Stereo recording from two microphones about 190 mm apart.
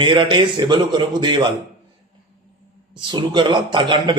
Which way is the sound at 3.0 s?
25° right (ahead or behind).